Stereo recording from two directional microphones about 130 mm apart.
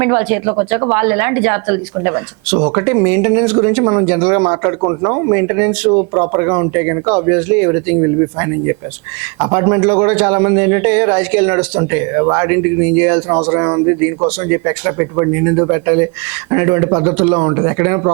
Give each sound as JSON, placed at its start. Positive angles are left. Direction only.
{"t": 0.0, "sound": "speech", "side_deg": -20}